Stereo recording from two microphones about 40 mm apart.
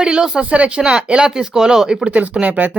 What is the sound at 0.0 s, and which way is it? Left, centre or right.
Speech, centre.